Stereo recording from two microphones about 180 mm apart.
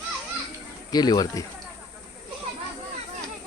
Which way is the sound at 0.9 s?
20° left (ahead or behind).